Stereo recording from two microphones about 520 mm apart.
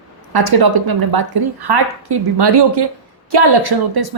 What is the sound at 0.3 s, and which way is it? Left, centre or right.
A woman's voice, right.